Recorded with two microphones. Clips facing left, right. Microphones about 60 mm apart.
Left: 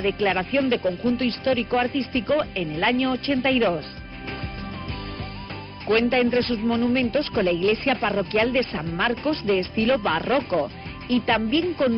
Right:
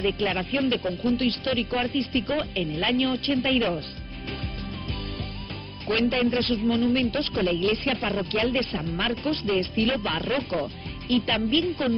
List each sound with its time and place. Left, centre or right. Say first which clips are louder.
0.0 s speech: left 3 dB; left
5.9 s speech: left 4 dB; left
7.0 s speech: left 3 dB; left
10.3 s speech: left 4 dB; left
11.1 s speech: left 3 dB; left